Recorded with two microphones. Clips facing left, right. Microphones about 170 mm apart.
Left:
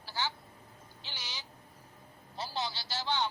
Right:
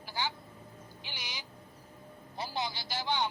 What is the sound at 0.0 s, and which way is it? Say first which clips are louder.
Vehicle: right 1 dB; 15° right (ahead or behind).